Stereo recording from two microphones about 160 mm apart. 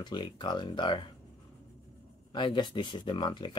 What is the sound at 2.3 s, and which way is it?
Speech, 30° left (ahead or behind).